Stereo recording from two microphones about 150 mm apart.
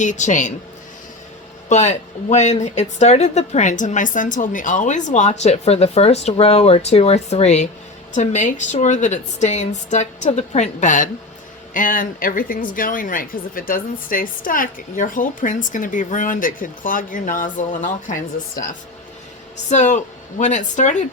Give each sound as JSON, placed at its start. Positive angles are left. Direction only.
{"t": 0.0, "sound": "a woman's voice", "side_deg": 55}
{"t": 1.7, "sound": "a woman's voice", "side_deg": 50}
{"t": 19.7, "sound": "speech", "side_deg": 55}